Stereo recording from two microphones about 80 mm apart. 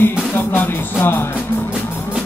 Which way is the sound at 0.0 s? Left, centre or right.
Left.